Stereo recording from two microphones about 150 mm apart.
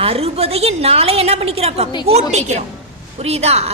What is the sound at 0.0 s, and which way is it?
A woman's voice, 40° right (ahead or behind).